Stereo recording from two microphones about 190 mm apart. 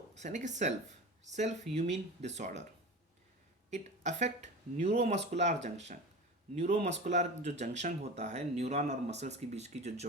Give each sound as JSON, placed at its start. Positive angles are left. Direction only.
{"t": 0.1, "sound": "speech", "side_deg": -40}
{"t": 3.7, "sound": "speech", "side_deg": -35}
{"t": 6.6, "sound": "speech", "side_deg": -35}